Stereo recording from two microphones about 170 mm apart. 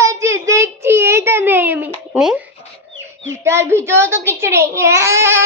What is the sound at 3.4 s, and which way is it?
A child's voice, 15° right (ahead or behind).